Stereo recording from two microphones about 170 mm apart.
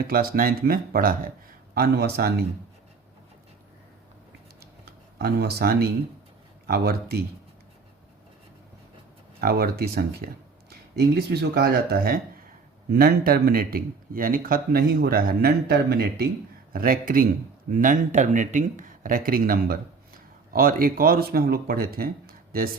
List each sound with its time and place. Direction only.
0.0 s speech: 60° right (ahead or behind)
5.2 s speech: 70° right (ahead or behind)
9.4 s speech: 65° right (ahead or behind)
16.7 s speech: 55° right (ahead or behind)